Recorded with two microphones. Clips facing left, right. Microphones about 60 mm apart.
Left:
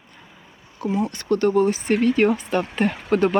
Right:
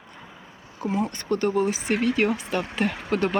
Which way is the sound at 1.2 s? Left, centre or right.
Right.